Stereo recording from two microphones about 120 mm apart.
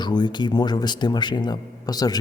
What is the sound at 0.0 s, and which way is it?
Speech, 35° left (ahead or behind).